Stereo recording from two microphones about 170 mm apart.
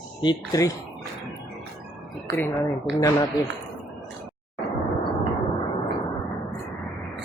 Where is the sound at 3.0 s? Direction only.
20° left (ahead or behind).